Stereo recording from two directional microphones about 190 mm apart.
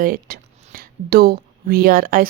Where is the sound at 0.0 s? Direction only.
50° right (ahead or behind).